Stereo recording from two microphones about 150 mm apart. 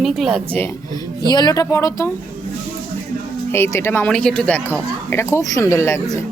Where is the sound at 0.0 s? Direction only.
Centre (ahead or behind).